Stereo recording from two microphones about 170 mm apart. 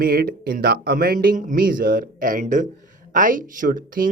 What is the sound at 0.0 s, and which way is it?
Speech, 60° right (ahead or behind).